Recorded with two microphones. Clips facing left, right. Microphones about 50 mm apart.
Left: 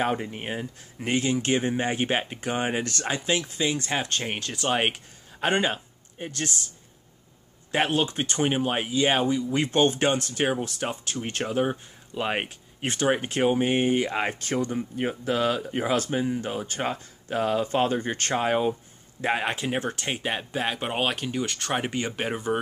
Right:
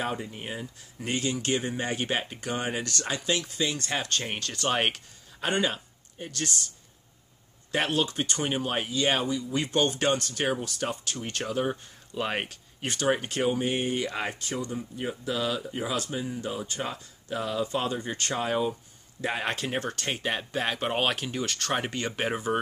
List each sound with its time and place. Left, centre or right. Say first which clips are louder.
0.0 s speech: left 5 dB; left; by 4.9 s centre
4.9 s speech: left 2 dB; left
7.7 s speech: left 3 dB; left
11.7 s speech: left 2 dB; centre; by 14.3 s left
14.4 s speech: left 5 dB; left
19.4 s speech: left 2 dB; centre